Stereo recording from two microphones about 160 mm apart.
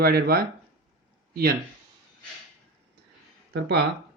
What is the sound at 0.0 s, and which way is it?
A man's voice, 75° right (ahead or behind).